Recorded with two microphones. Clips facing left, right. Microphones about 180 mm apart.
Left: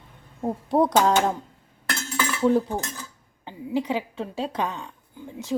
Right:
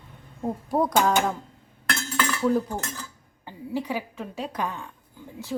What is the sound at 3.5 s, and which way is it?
A woman's voice, 20° left (ahead or behind).